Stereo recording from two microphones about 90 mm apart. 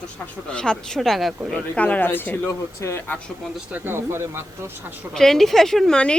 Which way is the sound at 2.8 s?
35° left (ahead or behind).